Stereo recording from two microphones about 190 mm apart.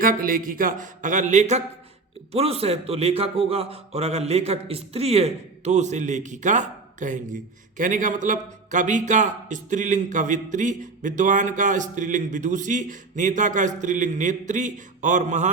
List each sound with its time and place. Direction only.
0.0 s a man's voice: 45° right (ahead or behind)